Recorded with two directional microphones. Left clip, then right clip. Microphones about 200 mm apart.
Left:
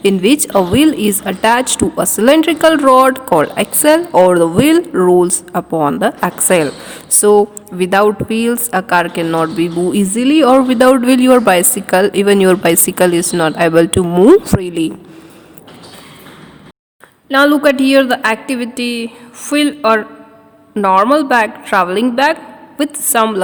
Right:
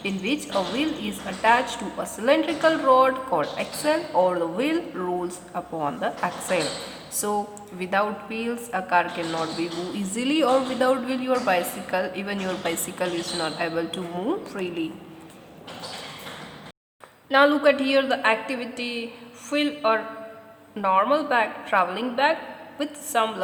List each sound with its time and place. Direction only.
0.0 s a woman's voice: 50° left (ahead or behind)
17.2 s a woman's voice: 35° left (ahead or behind)